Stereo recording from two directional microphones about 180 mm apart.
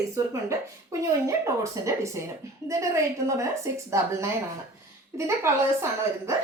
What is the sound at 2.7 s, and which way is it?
A woman's voice, 15° right (ahead or behind).